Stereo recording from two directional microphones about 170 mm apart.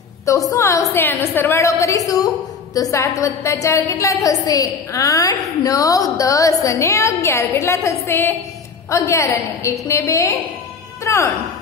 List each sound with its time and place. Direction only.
0.2 s a woman's voice: 20° left (ahead or behind)